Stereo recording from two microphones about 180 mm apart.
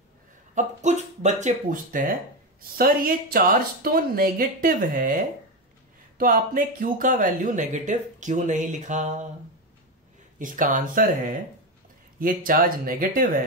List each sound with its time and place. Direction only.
0.6 s speech: 40° right (ahead or behind)
6.1 s speech: 50° right (ahead or behind)
10.4 s speech: 45° right (ahead or behind)